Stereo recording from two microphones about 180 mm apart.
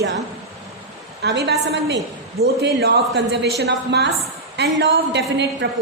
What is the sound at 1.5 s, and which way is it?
A man's voice, 70° right (ahead or behind).